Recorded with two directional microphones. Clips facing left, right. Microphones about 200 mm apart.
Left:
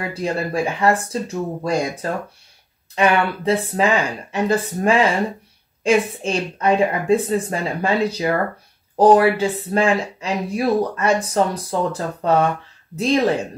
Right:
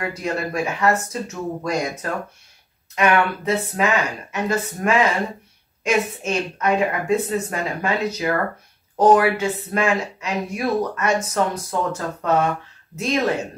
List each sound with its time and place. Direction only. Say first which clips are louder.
0.1 s speech: left 3 dB; 30° left (ahead or behind)